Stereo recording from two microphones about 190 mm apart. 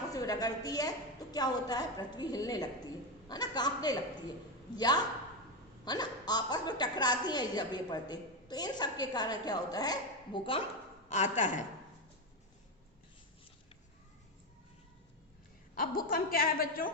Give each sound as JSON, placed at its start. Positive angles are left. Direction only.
{"t": 0.1, "sound": "a woman's voice", "side_deg": 20}
{"t": 11.1, "sound": "a woman's voice", "side_deg": 40}
{"t": 15.7, "sound": "a woman's voice", "side_deg": 50}